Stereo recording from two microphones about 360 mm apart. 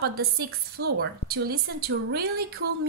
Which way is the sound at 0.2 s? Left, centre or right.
Right.